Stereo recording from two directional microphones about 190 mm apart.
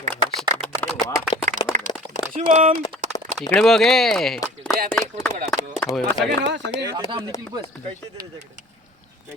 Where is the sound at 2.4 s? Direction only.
45° right (ahead or behind).